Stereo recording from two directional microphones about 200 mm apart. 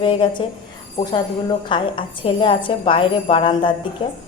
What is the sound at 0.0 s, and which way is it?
A woman's voice, 25° left (ahead or behind).